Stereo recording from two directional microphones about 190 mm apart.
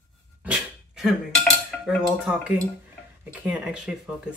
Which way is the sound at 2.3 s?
10° right (ahead or behind).